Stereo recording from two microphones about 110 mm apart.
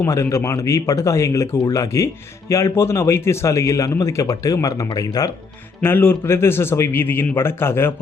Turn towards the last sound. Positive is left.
turn(degrees=20)  # may be behind; listen again after turning